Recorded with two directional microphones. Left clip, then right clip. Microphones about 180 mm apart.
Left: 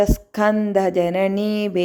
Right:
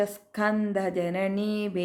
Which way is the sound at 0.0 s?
35° left (ahead or behind).